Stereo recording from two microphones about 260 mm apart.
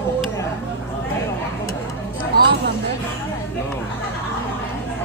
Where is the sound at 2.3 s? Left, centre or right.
Right.